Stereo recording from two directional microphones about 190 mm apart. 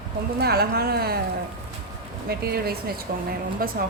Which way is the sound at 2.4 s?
55° right (ahead or behind).